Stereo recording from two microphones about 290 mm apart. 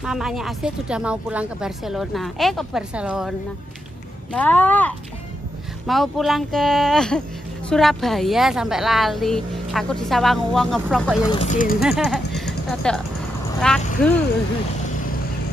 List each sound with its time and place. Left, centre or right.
0.0 s a woman's voice: centre
11.3 s speech: left
11.8 s a woman's voice: centre